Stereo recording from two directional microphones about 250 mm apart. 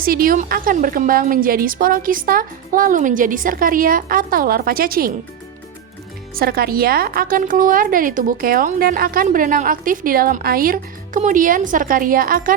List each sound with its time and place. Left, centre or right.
0.0 s a woman's voice: right
6.3 s a woman's voice: right